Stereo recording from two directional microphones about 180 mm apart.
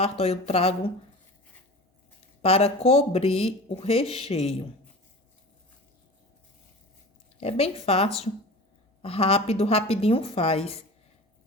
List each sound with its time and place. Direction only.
0.0 s speech: 35° left (ahead or behind)
2.4 s speech: 35° left (ahead or behind)
7.3 s speech: 35° left (ahead or behind)